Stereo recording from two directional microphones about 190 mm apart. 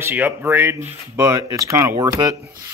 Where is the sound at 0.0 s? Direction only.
10° right (ahead or behind).